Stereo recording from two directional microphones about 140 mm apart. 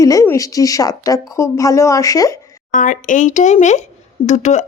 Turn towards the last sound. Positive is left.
turn(degrees=55)  # may be behind; listen again after turning